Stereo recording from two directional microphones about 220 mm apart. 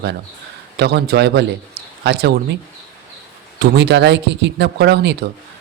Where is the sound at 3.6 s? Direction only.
50° right (ahead or behind).